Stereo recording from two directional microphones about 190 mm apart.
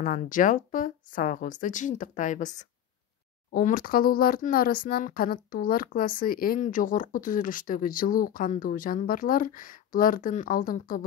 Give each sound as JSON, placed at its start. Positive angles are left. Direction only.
{"t": 0.0, "sound": "speech", "side_deg": 45}